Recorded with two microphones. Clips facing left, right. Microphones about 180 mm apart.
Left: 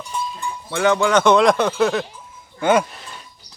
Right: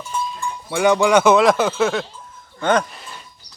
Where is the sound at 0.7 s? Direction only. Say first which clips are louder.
Right 2 dB; 15° right (ahead or behind); by 2.8 s 10° left (ahead or behind).